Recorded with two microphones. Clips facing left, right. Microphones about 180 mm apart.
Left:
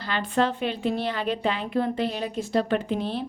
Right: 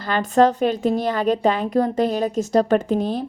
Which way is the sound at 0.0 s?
45° right (ahead or behind).